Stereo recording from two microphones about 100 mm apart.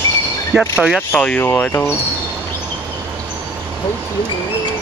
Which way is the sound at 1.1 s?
15° left (ahead or behind).